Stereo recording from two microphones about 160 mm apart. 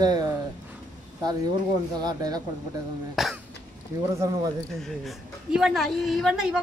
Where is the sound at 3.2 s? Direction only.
Centre (ahead or behind).